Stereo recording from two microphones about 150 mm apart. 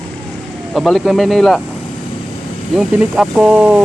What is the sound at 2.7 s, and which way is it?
Speech, 5° right (ahead or behind).